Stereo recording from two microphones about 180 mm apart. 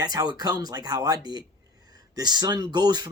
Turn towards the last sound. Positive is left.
turn(degrees=-25)  # may be behind; listen again after turning